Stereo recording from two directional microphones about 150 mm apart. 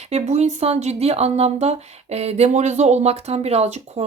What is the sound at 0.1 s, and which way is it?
Speech, 50° right (ahead or behind).